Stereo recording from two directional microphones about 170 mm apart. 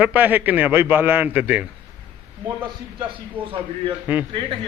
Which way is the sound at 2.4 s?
25° right (ahead or behind).